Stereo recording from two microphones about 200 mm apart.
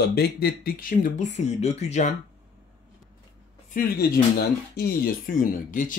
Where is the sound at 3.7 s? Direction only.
45° left (ahead or behind).